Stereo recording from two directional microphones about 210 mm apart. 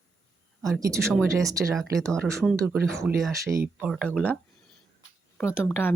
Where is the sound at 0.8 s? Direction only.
15° right (ahead or behind).